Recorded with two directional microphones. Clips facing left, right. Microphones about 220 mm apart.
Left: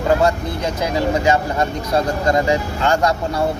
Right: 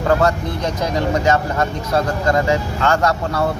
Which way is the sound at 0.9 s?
10° left (ahead or behind).